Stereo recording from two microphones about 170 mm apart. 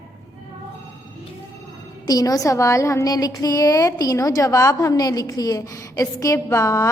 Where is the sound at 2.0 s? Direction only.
20° left (ahead or behind).